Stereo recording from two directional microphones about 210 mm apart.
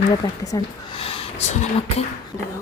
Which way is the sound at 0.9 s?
25° left (ahead or behind).